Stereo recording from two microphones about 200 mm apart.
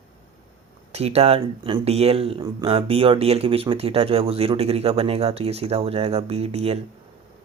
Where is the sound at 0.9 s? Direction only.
30° right (ahead or behind).